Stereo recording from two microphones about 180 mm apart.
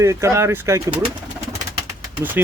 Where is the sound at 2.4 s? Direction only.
10° right (ahead or behind).